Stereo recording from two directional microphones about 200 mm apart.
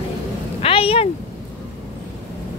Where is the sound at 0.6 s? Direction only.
30° left (ahead or behind).